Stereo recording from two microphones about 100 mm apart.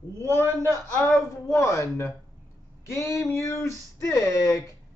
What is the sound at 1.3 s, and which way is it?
Speech, 30° left (ahead or behind).